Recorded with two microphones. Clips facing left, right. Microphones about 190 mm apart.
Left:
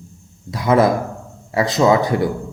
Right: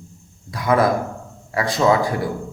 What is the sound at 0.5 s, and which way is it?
A man's voice, 25° left (ahead or behind).